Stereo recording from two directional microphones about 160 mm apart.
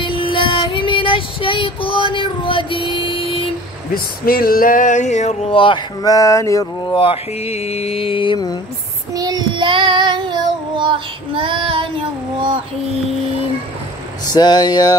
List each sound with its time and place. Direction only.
0.0 s child singing: 30° left (ahead or behind)
2.1 s female singing: 30° left (ahead or behind)
3.9 s a sound: 65° left (ahead or behind); by 7.0 s 20° left (ahead or behind)
7.0 s mantra: 35° left (ahead or behind)
9.1 s child singing: 25° right (ahead or behind)
14.2 s speech: 25° left (ahead or behind)